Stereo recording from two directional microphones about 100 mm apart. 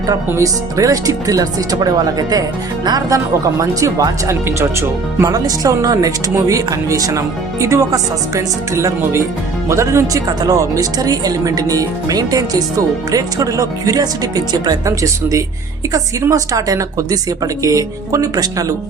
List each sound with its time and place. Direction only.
0.3 s speech: 30° right (ahead or behind)